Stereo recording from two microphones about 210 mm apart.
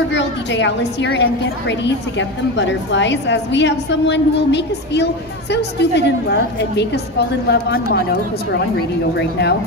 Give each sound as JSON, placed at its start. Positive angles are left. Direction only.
{"t": 0.1, "sound": "a woman's voice", "side_deg": 60}